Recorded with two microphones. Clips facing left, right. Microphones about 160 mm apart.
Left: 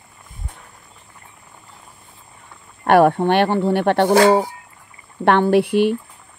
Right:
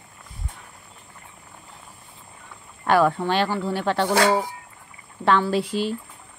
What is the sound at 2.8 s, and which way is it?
Speech, 60° left (ahead or behind).